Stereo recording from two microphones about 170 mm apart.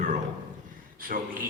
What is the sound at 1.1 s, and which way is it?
Speech, 60° right (ahead or behind).